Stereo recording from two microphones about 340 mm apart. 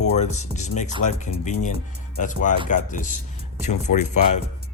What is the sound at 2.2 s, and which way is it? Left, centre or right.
Speech, left.